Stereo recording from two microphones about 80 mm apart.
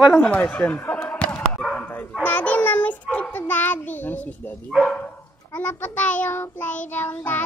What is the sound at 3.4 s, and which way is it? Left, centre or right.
Child singing, left.